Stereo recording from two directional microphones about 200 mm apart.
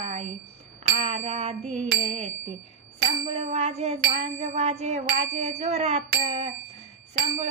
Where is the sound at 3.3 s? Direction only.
30° right (ahead or behind).